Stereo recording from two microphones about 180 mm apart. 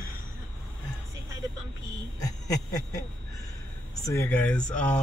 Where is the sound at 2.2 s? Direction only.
20° left (ahead or behind).